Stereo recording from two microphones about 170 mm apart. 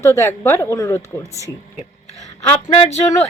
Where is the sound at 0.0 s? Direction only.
15° left (ahead or behind).